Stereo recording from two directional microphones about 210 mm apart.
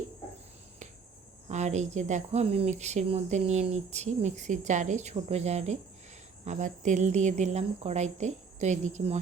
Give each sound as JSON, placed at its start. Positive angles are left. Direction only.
{"t": 1.5, "sound": "speech", "side_deg": -35}